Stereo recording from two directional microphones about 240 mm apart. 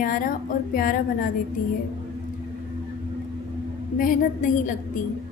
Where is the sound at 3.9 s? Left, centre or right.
Left.